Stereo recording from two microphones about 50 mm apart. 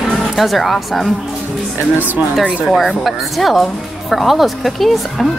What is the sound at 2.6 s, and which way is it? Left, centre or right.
Speech, centre.